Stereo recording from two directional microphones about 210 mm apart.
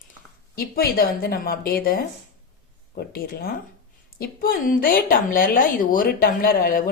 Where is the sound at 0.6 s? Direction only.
45° left (ahead or behind).